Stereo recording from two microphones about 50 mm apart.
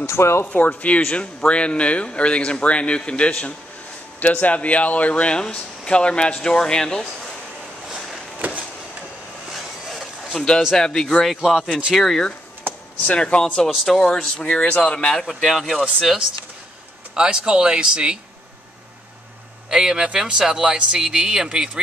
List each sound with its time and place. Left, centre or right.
0.0 s speech: left
0.5 s speech: left
8.4 s a sound: right
9.5 s vehicle: centre
10.3 s speech: centre
11.4 s speech: centre
11.9 s speech: centre
13.0 s speech: left
13.7 s speech: centre; by 15.1 s left
15.1 s speech: centre
17.1 s speech: centre
19.7 s speech: centre